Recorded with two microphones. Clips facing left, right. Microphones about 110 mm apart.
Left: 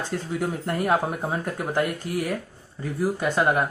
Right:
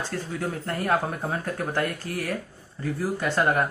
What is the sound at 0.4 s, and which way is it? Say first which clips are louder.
A man's voice: left 3 dB; 15° left (ahead or behind).